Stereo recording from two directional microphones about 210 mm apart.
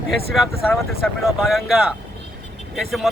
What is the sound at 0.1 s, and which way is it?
Speech, centre (ahead or behind).